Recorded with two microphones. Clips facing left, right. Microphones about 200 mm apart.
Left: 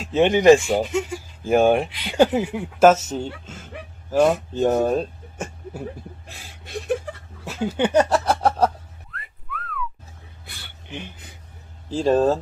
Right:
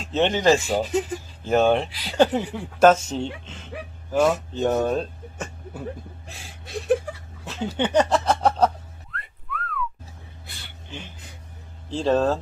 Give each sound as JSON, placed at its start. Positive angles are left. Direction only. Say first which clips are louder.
{"t": 0.0, "sound": "speech", "louder": "left 5 dB", "side_deg": 10}
{"t": 1.9, "sound": "speech", "louder": "left 3 dB", "side_deg": -35}
{"t": 2.1, "sound": "speech", "louder": "left 2 dB", "side_deg": 10}
{"t": 7.4, "sound": "a sound", "louder": "left 3 dB", "side_deg": 10}
{"t": 11.9, "sound": "speech", "louder": "left 3 dB", "side_deg": 10}